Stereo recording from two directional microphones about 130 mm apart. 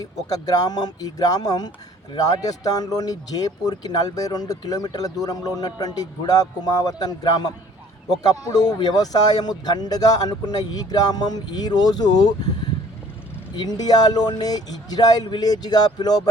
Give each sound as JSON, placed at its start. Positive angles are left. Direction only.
{"t": 0.3, "sound": "a man's voice", "side_deg": 30}
{"t": 13.6, "sound": "a man's voice", "side_deg": 30}